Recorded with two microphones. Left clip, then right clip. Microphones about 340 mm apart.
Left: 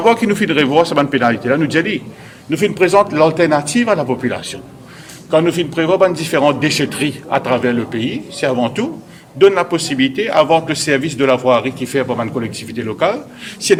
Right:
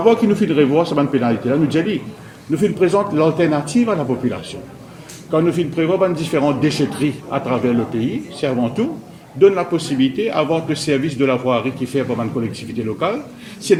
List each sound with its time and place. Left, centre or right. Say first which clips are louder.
0.0 s a man's voice: left 1 dB; left